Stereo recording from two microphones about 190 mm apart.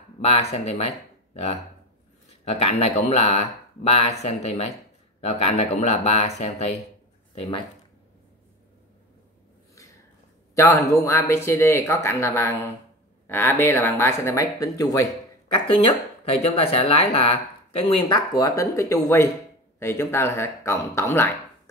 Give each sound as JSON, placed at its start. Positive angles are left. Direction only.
{"t": 0.2, "sound": "speech", "side_deg": 35}
{"t": 10.5, "sound": "speech", "side_deg": 15}